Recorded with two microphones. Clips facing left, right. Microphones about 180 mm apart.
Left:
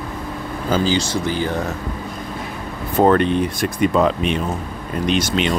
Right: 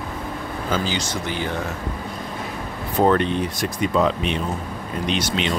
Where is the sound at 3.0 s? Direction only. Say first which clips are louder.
Left 4 dB; 55° left (ahead or behind).